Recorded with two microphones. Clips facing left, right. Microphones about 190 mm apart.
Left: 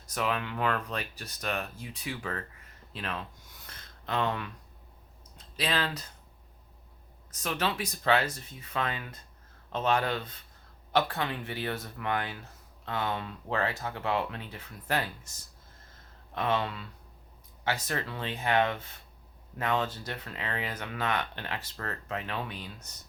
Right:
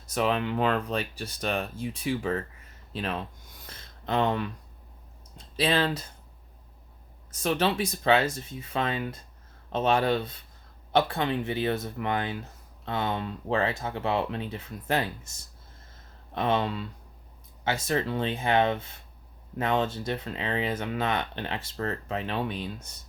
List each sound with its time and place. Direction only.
0.1 s speech: 25° right (ahead or behind)
3.7 s a sound: 30° right (ahead or behind)
5.5 s speech: 25° right (ahead or behind)
7.3 s speech: 30° right (ahead or behind)
16.3 s speech: 30° right (ahead or behind)